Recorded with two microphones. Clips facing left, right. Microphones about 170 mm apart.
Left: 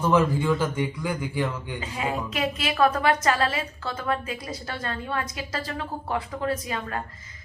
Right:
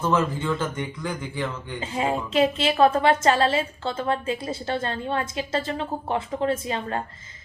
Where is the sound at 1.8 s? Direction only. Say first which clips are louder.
Right 4 dB; 30° right (ahead or behind).